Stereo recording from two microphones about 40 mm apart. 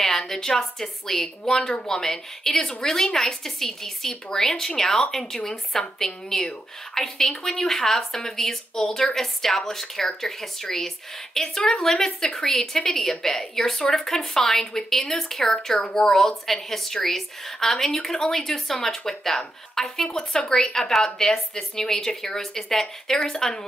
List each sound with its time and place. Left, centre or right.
0.3 s speech: centre